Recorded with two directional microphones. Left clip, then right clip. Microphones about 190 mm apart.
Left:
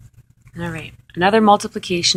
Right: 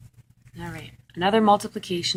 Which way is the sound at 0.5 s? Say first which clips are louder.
Left 9 dB; 25° left (ahead or behind).